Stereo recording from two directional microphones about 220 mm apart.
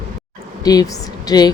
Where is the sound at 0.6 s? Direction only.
15° left (ahead or behind).